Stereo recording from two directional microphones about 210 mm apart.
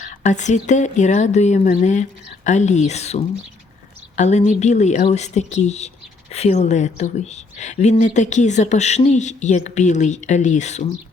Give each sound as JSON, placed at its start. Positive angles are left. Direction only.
{"t": 0.0, "sound": "speech", "side_deg": 35}